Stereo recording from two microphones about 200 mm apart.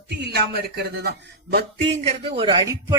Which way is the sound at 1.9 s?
30° right (ahead or behind).